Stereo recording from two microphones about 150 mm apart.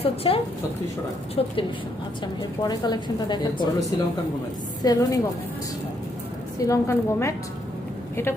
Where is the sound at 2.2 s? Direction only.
25° left (ahead or behind).